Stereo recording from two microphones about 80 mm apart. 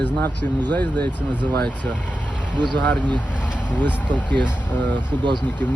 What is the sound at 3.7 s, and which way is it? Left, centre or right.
Speech, left.